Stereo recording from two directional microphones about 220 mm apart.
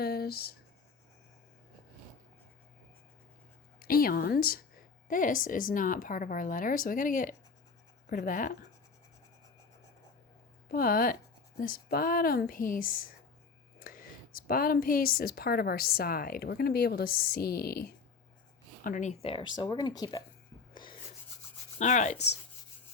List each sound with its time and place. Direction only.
0.0 s a sound: 45° left (ahead or behind)
3.8 s a woman's voice: 40° left (ahead or behind)
10.7 s a woman's voice: 40° left (ahead or behind); by 20.2 s 20° left (ahead or behind)
21.8 s a woman's voice: 35° left (ahead or behind)